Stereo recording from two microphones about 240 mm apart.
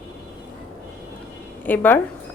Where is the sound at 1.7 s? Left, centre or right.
Centre.